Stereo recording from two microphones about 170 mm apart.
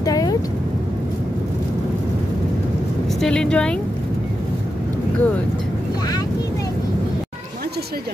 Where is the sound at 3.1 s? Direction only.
5° left (ahead or behind).